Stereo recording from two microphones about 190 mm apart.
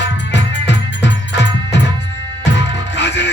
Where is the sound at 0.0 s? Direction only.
65° left (ahead or behind).